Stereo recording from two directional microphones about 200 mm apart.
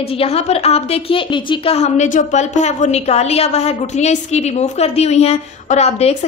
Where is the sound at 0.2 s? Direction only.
30° left (ahead or behind).